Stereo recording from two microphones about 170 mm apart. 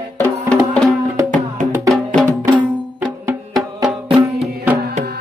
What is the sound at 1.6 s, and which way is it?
Music, 50° right (ahead or behind).